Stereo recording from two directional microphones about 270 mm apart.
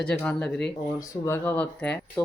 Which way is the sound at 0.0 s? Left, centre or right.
Centre.